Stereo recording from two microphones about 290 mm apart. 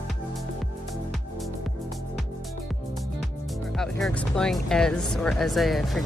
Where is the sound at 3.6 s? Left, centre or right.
Centre.